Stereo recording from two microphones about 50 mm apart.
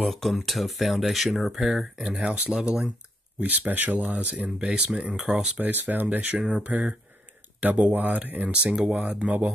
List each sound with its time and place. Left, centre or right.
0.0 s speech: centre
2.0 s speech: centre
3.3 s speech: right; by 5.5 s centre
5.6 s speech: right
8.6 s speech: centre